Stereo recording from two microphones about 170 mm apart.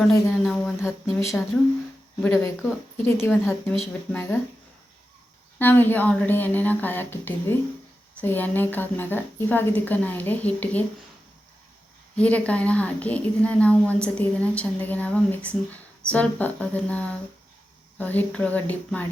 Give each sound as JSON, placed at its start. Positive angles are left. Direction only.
{"t": 0.0, "sound": "a woman's voice", "side_deg": 5}
{"t": 5.5, "sound": "a woman's voice", "side_deg": 10}
{"t": 12.1, "sound": "a woman's voice", "side_deg": 5}